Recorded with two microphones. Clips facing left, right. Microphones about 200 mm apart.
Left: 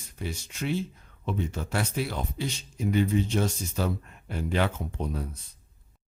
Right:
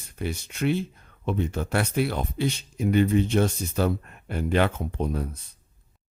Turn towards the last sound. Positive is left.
turn(degrees=-60)  # may be behind; listen again after turning